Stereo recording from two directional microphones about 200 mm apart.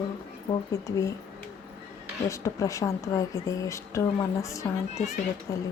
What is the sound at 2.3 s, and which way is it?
Speech, 15° left (ahead or behind).